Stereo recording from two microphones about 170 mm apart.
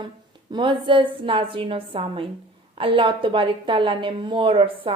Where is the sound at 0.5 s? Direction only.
30° right (ahead or behind).